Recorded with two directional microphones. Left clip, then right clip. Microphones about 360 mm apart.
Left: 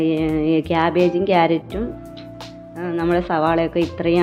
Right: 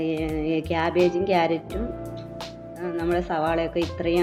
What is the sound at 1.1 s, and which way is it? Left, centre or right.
Speech, left.